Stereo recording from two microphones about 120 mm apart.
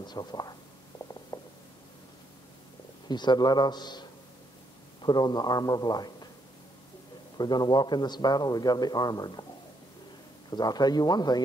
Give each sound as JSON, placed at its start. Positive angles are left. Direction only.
{"t": 0.0, "sound": "a sound", "side_deg": 35}
{"t": 3.1, "sound": "a man's voice", "side_deg": 35}
{"t": 5.0, "sound": "a man's voice", "side_deg": 35}
{"t": 7.3, "sound": "a man's voice", "side_deg": 35}
{"t": 10.5, "sound": "a man's voice", "side_deg": 35}